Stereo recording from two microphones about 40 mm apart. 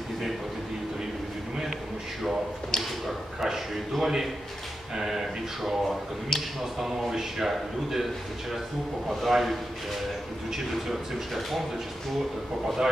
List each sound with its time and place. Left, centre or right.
2.7 s a sound: centre
3.3 s a man's voice: centre
12.6 s a man's voice: centre